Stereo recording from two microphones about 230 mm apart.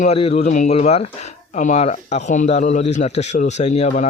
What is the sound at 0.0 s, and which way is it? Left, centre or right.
Speech, left.